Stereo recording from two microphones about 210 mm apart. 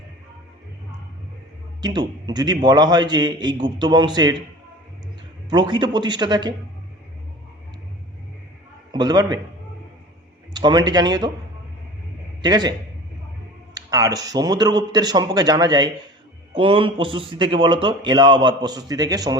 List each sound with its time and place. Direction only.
1.8 s a man's voice: 20° right (ahead or behind)
5.5 s a man's voice: 20° right (ahead or behind)
8.9 s a man's voice: 20° right (ahead or behind)
10.5 s a man's voice: 20° right (ahead or behind)
12.4 s a man's voice: 20° right (ahead or behind)
13.7 s a man's voice: 15° right (ahead or behind)